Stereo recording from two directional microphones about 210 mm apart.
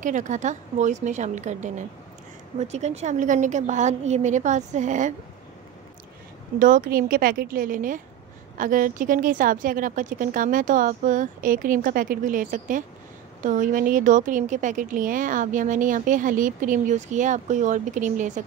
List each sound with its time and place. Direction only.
0.0 s a woman's voice: 35° right (ahead or behind)
6.6 s a woman's voice: 40° right (ahead or behind)